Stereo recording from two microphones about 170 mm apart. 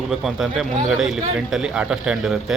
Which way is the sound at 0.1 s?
Centre (ahead or behind).